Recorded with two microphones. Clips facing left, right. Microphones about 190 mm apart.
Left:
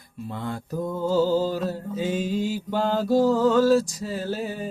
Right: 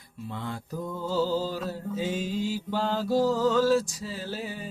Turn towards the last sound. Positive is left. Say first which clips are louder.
# left 6 dB
turn(degrees=45)  # may be behind; listen again after turning